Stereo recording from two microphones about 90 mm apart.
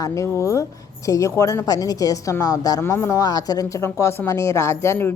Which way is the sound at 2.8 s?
30° left (ahead or behind).